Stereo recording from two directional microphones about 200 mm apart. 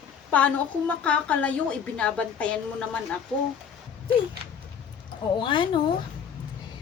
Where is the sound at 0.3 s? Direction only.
10° left (ahead or behind).